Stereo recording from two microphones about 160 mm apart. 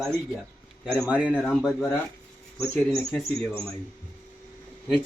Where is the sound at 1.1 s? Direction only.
10° right (ahead or behind).